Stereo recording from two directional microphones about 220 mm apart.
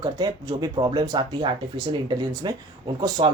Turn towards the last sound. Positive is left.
turn(degrees=-15)  # may be behind; listen again after turning